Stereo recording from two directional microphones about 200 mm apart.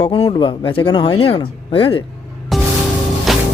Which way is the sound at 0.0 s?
25° left (ahead or behind).